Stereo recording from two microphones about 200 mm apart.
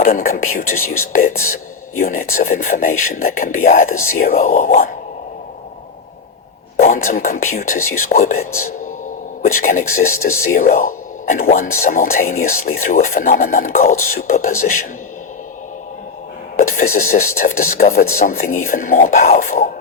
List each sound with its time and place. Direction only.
0.0 s speech: 45° left (ahead or behind)
6.8 s speech: 40° left (ahead or behind)
16.6 s a sound: 40° left (ahead or behind)
17.0 s speech: 40° left (ahead or behind)